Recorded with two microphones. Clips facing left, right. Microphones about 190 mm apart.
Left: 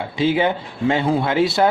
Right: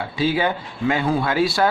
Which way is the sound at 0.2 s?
20° left (ahead or behind).